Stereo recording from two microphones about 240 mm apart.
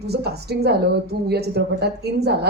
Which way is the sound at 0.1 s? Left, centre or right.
Right.